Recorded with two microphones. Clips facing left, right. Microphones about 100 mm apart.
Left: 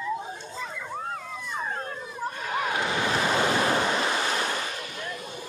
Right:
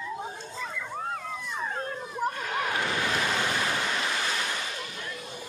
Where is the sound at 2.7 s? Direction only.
20° left (ahead or behind); by 4.5 s 40° left (ahead or behind).